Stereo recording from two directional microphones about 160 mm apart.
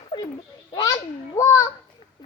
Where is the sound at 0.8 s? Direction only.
20° left (ahead or behind).